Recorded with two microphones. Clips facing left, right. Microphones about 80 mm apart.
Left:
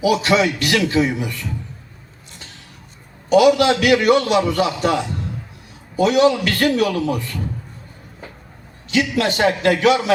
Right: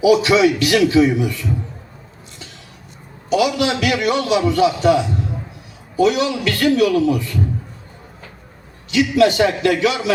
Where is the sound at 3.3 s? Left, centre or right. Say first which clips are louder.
Left 4 dB; left.